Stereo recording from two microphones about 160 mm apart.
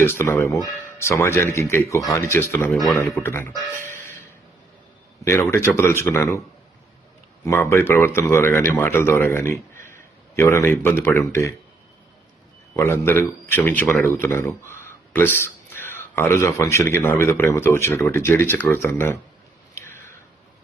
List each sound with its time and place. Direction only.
0.0 s speech: 15° left (ahead or behind)
3.8 s a sound: 15° left (ahead or behind)
5.2 s speech: 15° left (ahead or behind)
7.4 s speech: 20° left (ahead or behind)
12.7 s speech: 15° left (ahead or behind)
19.7 s a sound: 15° left (ahead or behind)